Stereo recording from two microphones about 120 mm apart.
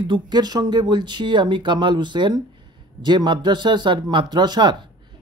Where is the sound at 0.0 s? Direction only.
40° right (ahead or behind).